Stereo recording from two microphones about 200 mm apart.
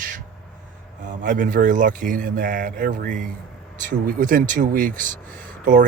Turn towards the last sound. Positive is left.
turn(degrees=-40)  # may be behind; listen again after turning